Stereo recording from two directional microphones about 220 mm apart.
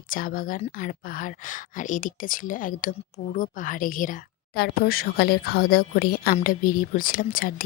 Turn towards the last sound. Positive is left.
turn(degrees=40)  # may be behind; listen again after turning